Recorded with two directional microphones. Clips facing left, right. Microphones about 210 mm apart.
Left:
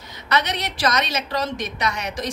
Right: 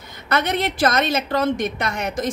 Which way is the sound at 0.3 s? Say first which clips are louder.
Right 3 dB; 50° right (ahead or behind).